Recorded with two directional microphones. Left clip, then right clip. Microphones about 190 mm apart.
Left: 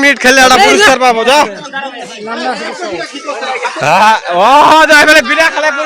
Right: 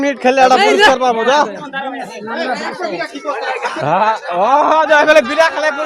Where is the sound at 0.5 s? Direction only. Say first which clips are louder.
Left 4 dB; 50° left (ahead or behind).